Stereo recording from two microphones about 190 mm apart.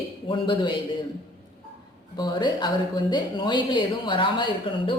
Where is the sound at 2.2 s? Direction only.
25° left (ahead or behind).